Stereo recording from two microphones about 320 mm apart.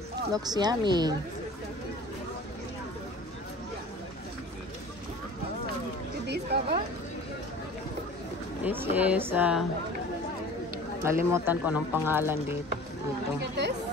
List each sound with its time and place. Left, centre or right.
0.3 s speech: centre
6.2 s a sound: right
8.6 s speech: centre
11.1 s speech: centre
13.4 s speech: right